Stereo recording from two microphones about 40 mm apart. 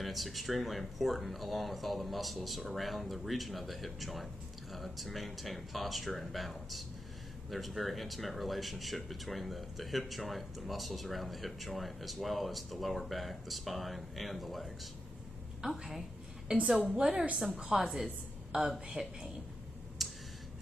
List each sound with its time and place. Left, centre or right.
0.0 s speech: centre
16.5 s a woman's voice: right
17.7 s a woman's voice: centre
20.0 s a sound: centre